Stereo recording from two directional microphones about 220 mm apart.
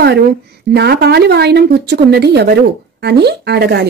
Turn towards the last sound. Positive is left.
turn(degrees=-50)  # may be behind; listen again after turning